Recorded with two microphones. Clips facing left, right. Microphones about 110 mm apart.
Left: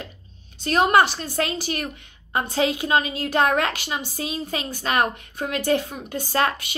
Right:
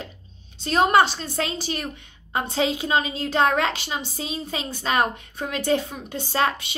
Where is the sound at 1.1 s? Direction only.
45° left (ahead or behind).